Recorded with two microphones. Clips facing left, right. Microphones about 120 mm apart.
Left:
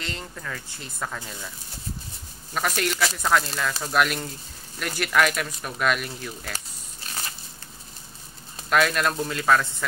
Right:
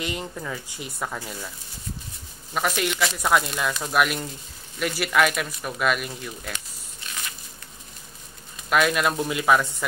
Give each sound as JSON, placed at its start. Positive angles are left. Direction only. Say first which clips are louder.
{"t": 0.0, "sound": "speech", "louder": "right 5 dB", "side_deg": -15}
{"t": 2.5, "sound": "speech", "louder": "right 1 dB", "side_deg": -5}
{"t": 6.5, "sound": "a sound", "louder": "even", "side_deg": 35}
{"t": 8.6, "sound": "speech", "louder": "right 1 dB", "side_deg": -5}
{"t": 9.1, "sound": "speech", "louder": "right 1 dB", "side_deg": -15}